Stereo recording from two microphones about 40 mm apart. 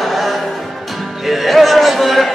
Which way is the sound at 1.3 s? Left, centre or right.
Centre.